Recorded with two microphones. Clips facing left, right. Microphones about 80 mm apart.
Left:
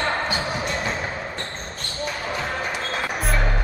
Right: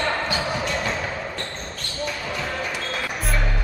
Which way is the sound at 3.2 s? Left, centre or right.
Centre.